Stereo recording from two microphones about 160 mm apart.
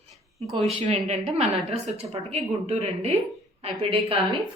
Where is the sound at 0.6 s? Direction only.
40° right (ahead or behind).